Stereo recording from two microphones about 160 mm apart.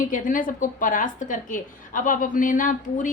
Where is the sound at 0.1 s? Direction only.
55° left (ahead or behind).